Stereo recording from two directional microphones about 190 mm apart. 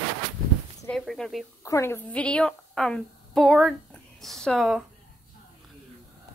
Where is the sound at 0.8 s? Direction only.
Centre (ahead or behind).